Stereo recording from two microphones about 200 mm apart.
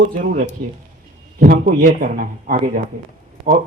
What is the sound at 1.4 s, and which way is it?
Speech, 50° right (ahead or behind).